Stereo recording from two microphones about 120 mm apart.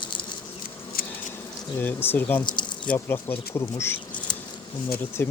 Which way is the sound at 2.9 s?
20° left (ahead or behind).